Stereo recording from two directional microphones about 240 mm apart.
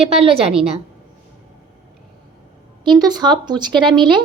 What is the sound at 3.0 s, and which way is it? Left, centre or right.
A woman's voice, centre.